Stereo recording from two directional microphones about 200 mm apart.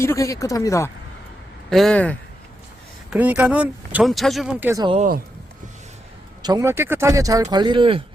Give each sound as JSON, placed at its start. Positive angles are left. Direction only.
{"t": 0.0, "sound": "speech", "side_deg": 15}
{"t": 1.7, "sound": "speech", "side_deg": 5}
{"t": 3.1, "sound": "speech", "side_deg": -5}
{"t": 4.7, "sound": "speech", "side_deg": -20}
{"t": 4.9, "sound": "speech", "side_deg": -45}
{"t": 6.4, "sound": "speech", "side_deg": -20}